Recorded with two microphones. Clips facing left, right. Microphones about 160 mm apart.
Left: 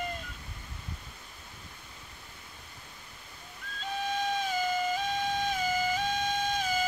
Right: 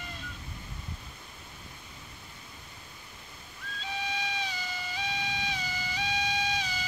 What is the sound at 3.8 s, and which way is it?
Music, 50° left (ahead or behind).